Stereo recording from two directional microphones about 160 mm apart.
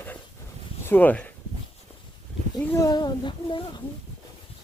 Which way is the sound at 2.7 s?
20° left (ahead or behind).